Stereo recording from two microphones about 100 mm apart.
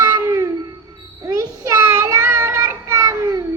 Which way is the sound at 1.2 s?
35° right (ahead or behind).